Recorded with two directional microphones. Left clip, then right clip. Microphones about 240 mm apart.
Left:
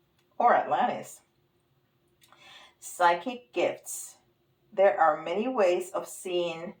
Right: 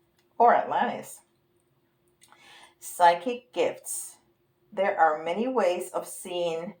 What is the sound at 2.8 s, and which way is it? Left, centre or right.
Speech, right.